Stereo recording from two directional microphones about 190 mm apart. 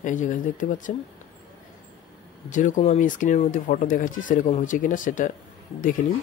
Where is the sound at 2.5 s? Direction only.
40° left (ahead or behind).